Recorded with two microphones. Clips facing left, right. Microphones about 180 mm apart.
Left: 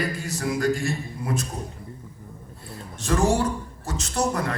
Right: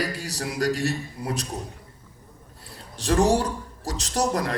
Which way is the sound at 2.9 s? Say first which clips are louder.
Right 1 dB; 35° right (ahead or behind).